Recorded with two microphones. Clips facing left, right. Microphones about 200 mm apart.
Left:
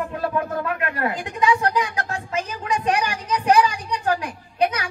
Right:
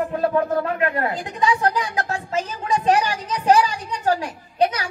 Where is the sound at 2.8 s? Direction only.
35° right (ahead or behind).